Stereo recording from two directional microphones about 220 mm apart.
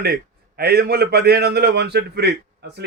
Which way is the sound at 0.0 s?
45° right (ahead or behind).